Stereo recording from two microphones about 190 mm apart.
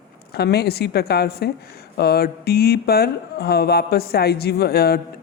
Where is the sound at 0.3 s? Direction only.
60° left (ahead or behind).